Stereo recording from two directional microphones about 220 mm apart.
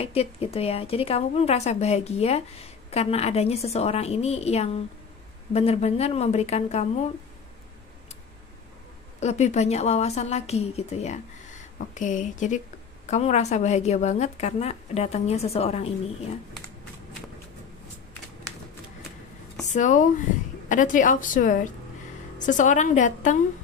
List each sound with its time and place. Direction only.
0.0 s a woman's voice: 25° left (ahead or behind)
9.2 s a woman's voice: 30° left (ahead or behind)
19.7 s a woman's voice: 35° left (ahead or behind)